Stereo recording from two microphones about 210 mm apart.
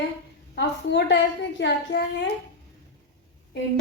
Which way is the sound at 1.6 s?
55° left (ahead or behind).